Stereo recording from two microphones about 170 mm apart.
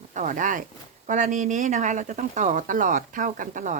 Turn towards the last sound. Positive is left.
turn(degrees=-50)  # may be behind; listen again after turning